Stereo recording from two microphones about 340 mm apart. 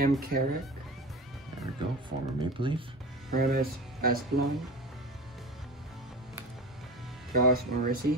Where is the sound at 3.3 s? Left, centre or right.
Right.